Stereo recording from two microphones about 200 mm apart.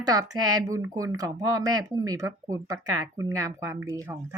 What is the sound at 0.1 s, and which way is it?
A woman's voice, 20° right (ahead or behind).